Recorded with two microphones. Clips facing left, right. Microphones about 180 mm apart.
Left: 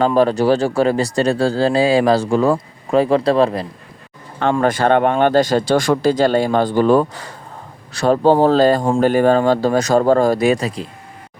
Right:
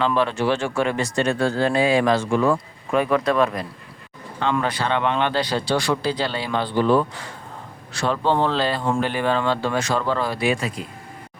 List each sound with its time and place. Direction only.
0.0 s speech: 40° left (ahead or behind)
4.6 s speech: 50° left (ahead or behind)